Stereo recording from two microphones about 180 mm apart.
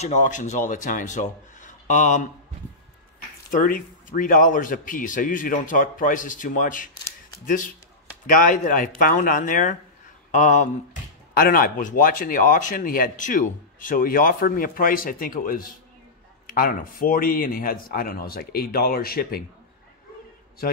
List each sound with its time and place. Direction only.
0.0 s speech: 45° left (ahead or behind)
3.5 s speech: 50° left (ahead or behind)
20.6 s speech: 55° left (ahead or behind)